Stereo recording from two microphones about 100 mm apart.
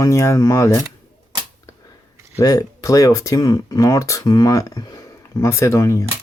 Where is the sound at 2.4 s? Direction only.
35° left (ahead or behind).